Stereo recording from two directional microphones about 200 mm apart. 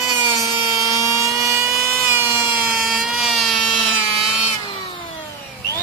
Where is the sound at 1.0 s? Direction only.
15° right (ahead or behind).